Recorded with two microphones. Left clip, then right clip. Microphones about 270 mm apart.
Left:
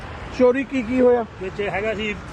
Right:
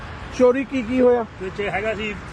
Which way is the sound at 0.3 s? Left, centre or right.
Centre.